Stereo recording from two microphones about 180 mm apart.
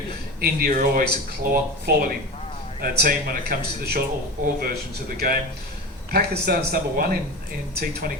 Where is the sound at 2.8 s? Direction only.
55° right (ahead or behind).